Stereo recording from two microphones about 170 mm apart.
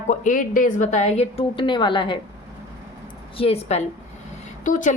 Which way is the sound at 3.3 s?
35° left (ahead or behind).